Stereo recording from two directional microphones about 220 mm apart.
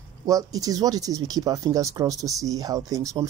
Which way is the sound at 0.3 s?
15° right (ahead or behind).